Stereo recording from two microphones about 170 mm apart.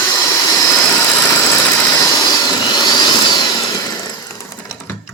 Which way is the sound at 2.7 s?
25° left (ahead or behind).